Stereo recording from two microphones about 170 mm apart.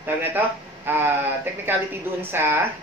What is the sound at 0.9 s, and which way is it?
Speech, 15° right (ahead or behind).